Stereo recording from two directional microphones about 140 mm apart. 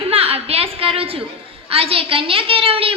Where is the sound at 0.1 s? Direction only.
45° right (ahead or behind).